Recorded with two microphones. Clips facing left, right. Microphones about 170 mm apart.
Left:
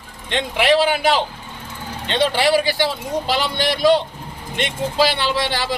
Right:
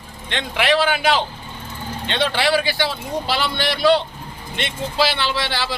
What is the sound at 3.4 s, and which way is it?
Speech, 40° left (ahead or behind).